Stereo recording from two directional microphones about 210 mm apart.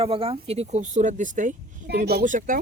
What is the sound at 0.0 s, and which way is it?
Speech, 25° right (ahead or behind).